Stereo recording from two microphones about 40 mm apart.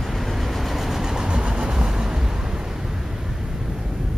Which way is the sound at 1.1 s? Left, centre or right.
Centre.